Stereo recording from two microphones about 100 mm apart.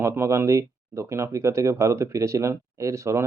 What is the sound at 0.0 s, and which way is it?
Speech, 25° right (ahead or behind).